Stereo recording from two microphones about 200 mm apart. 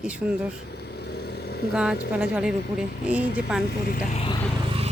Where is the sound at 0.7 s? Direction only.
55° left (ahead or behind).